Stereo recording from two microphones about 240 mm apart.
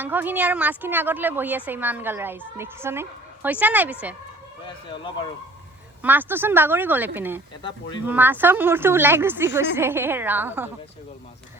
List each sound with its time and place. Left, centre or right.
0.0 s a woman's voice: centre
4.9 s speech: centre
6.0 s a woman's voice: centre